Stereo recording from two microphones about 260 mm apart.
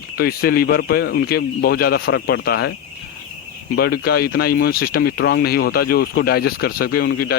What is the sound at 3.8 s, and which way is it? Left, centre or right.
Speech, left.